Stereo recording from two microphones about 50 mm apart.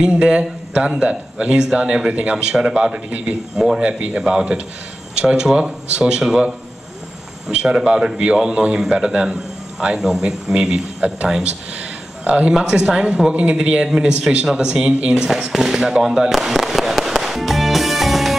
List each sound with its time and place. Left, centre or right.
0.0 s a man's voice: centre
2.3 s speech: centre
3.1 s a man's voice: right
3.5 s a man's voice: centre
12.3 s a man's voice: right; by 17.1 s centre
17.2 s music: centre